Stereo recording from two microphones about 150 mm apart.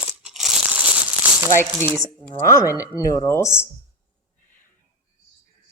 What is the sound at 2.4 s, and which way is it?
Speech, 20° left (ahead or behind).